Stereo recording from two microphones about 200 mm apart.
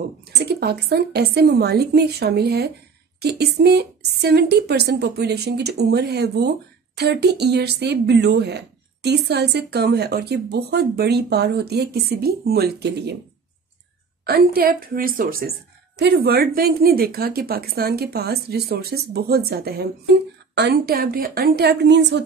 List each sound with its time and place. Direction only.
0.2 s speech: 55° right (ahead or behind)
14.2 s speech: 50° right (ahead or behind)